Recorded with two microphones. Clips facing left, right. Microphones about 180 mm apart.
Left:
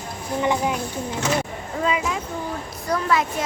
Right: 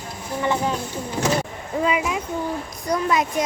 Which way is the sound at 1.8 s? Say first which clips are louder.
Right 1 dB; 15° right (ahead or behind).